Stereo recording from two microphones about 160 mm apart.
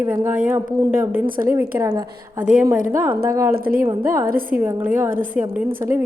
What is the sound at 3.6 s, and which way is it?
Speech, 65° right (ahead or behind).